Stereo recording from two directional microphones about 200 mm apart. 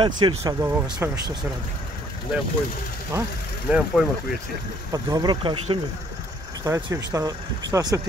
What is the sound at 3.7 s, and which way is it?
Speech, 10° right (ahead or behind).